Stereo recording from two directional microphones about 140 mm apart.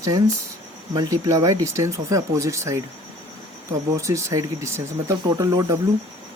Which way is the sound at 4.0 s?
20° right (ahead or behind).